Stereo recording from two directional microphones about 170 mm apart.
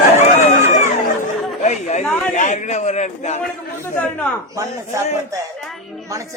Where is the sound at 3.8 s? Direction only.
10° left (ahead or behind).